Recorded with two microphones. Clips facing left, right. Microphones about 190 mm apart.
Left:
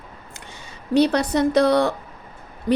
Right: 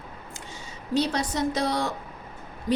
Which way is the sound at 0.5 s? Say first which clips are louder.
Left 7 dB; 60° left (ahead or behind).